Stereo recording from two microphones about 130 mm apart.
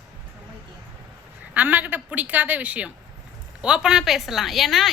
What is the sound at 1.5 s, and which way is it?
A woman's voice, 15° right (ahead or behind).